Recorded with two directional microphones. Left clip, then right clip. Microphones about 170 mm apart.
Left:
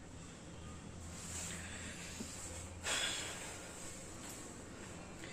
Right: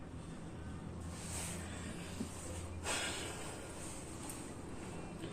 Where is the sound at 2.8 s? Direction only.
Centre (ahead or behind).